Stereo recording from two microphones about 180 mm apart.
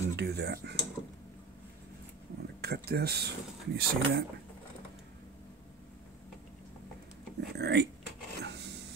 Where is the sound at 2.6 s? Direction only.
60° right (ahead or behind).